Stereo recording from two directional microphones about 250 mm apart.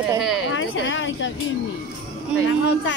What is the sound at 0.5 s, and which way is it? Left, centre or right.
Speech, left.